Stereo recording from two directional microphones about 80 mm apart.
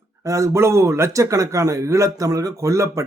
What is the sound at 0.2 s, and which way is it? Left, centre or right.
A man's voice, right.